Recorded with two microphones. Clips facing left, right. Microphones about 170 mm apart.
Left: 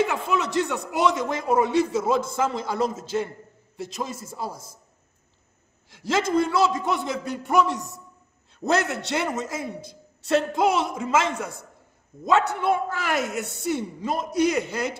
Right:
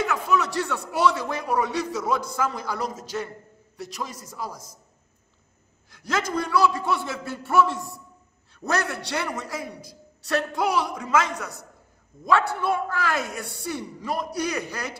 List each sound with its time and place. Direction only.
0.0 s a man's voice: 25° left (ahead or behind)
5.9 s a man's voice: 25° left (ahead or behind)